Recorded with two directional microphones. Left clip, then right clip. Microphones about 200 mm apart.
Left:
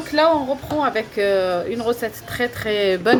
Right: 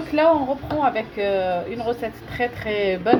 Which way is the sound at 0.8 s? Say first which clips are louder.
Left 1 dB; 40° left (ahead or behind).